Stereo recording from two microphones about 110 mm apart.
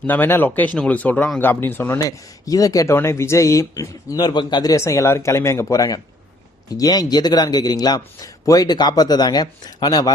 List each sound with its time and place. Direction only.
0.1 s speech: 20° left (ahead or behind)
2.0 s a man's voice: 30° left (ahead or behind)